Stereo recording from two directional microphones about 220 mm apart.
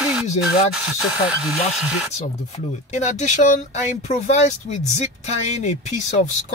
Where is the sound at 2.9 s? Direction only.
30° left (ahead or behind).